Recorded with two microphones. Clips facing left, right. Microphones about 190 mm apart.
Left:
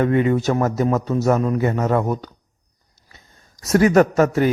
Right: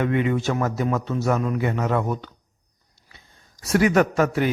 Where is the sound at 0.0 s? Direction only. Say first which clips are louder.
Left 4 dB; 40° left (ahead or behind).